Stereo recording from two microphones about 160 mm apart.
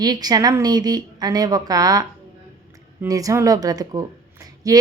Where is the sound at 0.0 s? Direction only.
25° right (ahead or behind).